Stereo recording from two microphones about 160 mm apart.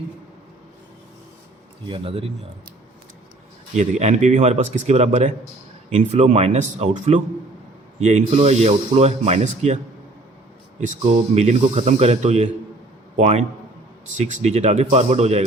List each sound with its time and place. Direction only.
1.9 s speech: 35° right (ahead or behind)
3.8 s speech: 45° right (ahead or behind)
11.0 s speech: 40° right (ahead or behind)